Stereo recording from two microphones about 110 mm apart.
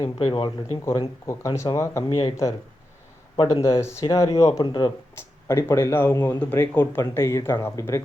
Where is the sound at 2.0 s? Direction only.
55° left (ahead or behind).